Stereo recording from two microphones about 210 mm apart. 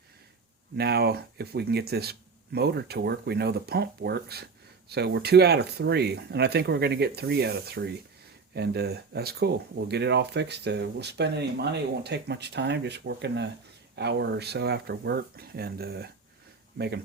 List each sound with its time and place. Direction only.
0.8 s speech: 50° right (ahead or behind)